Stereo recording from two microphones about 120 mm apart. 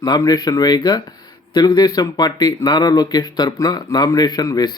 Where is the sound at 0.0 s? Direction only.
35° left (ahead or behind).